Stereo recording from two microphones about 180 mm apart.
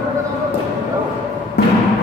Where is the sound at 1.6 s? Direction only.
65° left (ahead or behind).